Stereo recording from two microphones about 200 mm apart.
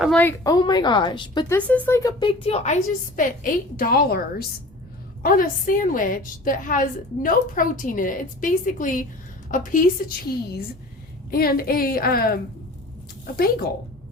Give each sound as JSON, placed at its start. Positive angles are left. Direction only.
{"t": 0.0, "sound": "a woman's voice", "side_deg": 5}
{"t": 1.5, "sound": "a woman's voice", "side_deg": 10}